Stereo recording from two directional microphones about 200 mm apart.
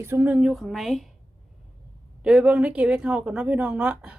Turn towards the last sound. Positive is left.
turn(degrees=-5)  # may be behind; listen again after turning